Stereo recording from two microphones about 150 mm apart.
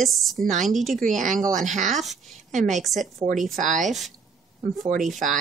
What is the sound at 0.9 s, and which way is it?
A woman's voice, 55° right (ahead or behind).